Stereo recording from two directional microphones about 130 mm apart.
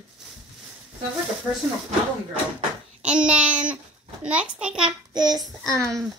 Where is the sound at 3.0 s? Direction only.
5° right (ahead or behind).